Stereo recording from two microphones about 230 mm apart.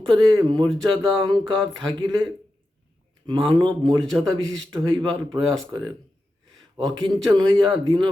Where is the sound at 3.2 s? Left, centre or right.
Right.